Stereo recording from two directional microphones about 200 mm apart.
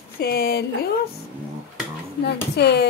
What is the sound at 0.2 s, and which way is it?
Speech, 50° left (ahead or behind).